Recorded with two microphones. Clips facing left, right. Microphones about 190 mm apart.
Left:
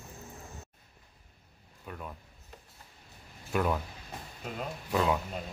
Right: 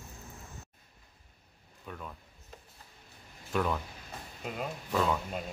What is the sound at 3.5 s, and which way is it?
Speech, 5° left (ahead or behind).